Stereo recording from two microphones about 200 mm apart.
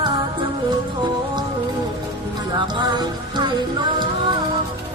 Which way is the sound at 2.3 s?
20° right (ahead or behind).